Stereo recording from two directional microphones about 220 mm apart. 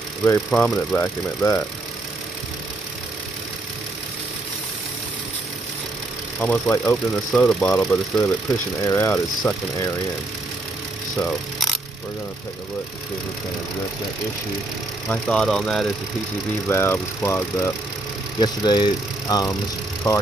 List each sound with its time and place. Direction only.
0.2 s speech: 5° left (ahead or behind)
6.4 s speech: 5° left (ahead or behind)
11.1 s speech: 5° left (ahead or behind)
15.0 s speech: 5° left (ahead or behind)